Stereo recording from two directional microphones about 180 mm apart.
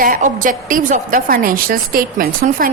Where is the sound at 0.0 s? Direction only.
50° right (ahead or behind).